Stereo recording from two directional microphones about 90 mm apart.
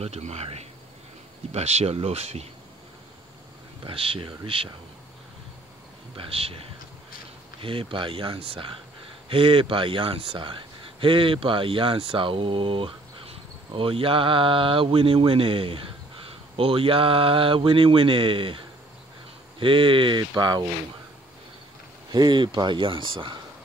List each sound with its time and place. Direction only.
3.8 s speech: 85° right
6.1 s speech: 90° right
7.6 s a man's voice: 80° right
19.6 s speech: 70° right (ahead or behind); by 20.6 s 50° right (ahead or behind)
22.1 s speech: 55° right (ahead or behind)